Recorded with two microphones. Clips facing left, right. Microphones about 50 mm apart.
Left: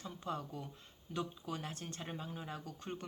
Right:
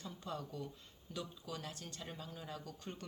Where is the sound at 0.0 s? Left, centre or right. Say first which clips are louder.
Left 3 dB; left.